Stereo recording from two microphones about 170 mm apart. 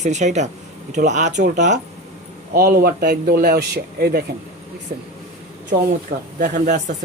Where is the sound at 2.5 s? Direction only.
65° right (ahead or behind).